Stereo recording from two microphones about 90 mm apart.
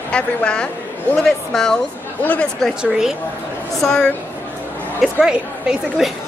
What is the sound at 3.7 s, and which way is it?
Speech, 5° left (ahead or behind).